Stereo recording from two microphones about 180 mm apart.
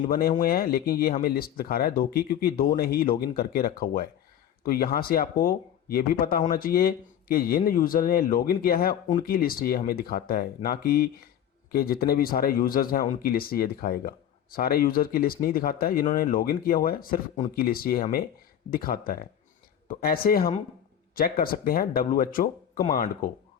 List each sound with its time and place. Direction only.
0.0 s speech: 55° left (ahead or behind)